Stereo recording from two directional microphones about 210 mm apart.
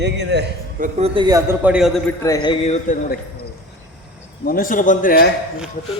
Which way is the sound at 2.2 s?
20° left (ahead or behind).